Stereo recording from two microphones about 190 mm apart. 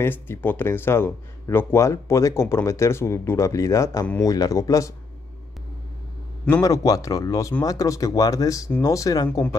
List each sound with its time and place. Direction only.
0.0 s speech: 10° left (ahead or behind)
6.4 s speech: 15° left (ahead or behind)